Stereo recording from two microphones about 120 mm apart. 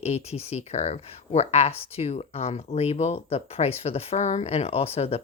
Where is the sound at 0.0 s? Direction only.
60° left (ahead or behind).